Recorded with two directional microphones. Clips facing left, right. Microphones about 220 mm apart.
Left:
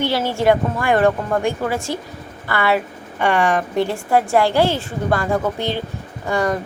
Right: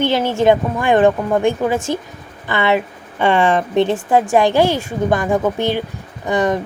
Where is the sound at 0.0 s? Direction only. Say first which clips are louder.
Right 3 dB; 20° right (ahead or behind).